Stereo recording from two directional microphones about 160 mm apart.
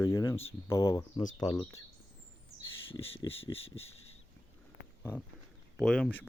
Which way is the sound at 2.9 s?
35° left (ahead or behind).